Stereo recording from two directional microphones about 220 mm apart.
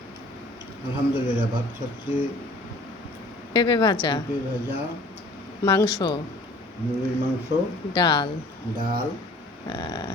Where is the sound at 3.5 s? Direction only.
20° left (ahead or behind).